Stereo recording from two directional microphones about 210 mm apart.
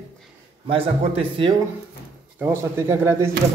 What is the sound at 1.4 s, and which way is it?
Speech, 25° right (ahead or behind).